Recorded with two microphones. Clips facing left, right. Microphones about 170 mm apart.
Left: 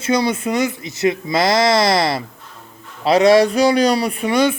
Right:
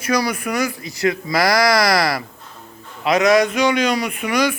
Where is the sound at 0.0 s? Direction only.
25° left (ahead or behind).